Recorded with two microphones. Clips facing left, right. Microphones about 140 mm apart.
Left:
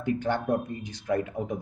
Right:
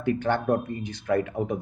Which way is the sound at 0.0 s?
65° right (ahead or behind).